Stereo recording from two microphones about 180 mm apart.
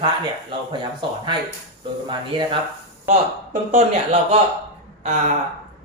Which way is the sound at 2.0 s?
25° right (ahead or behind).